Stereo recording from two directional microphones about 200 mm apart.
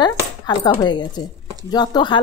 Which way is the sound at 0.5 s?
20° left (ahead or behind).